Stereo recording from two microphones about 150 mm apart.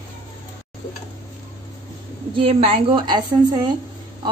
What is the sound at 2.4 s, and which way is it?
Speech, 35° right (ahead or behind).